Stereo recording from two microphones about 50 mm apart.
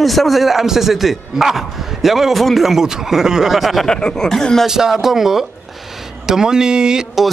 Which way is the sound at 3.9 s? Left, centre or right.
Centre.